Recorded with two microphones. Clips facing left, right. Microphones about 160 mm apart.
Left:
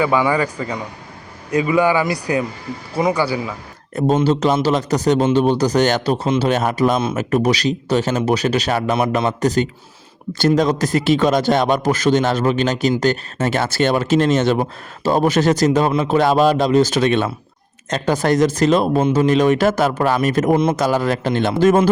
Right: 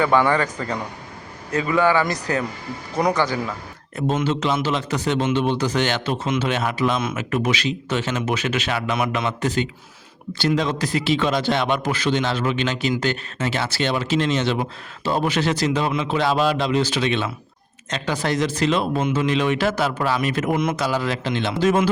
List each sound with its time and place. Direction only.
0.0 s speech: 10° left (ahead or behind)
3.9 s a man's voice: 35° left (ahead or behind)
20.7 s speech: 45° left (ahead or behind)